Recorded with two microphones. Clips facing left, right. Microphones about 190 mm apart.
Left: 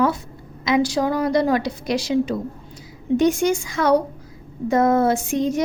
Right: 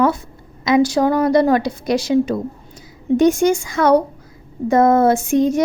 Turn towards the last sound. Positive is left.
turn(degrees=-50)  # may be behind; listen again after turning